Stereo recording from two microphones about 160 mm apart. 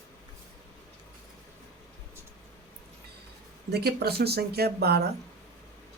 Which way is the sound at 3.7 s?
90° right.